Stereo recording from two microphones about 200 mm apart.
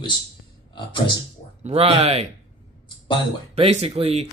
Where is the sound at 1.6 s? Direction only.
30° right (ahead or behind).